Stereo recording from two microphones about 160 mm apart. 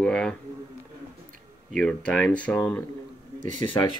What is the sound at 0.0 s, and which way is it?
Speech, 5° left (ahead or behind).